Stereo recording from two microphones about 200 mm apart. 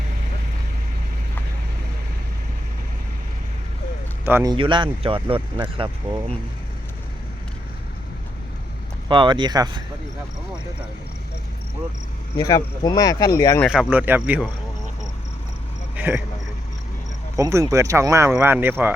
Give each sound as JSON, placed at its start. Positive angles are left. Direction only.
{"t": 4.3, "sound": "speech", "side_deg": -10}
{"t": 4.5, "sound": "speech", "side_deg": -25}
{"t": 9.0, "sound": "speech", "side_deg": -25}
{"t": 12.4, "sound": "speech", "side_deg": 20}
{"t": 13.7, "sound": "speech", "side_deg": -5}
{"t": 16.0, "sound": "speech", "side_deg": -10}
{"t": 17.3, "sound": "speech", "side_deg": -15}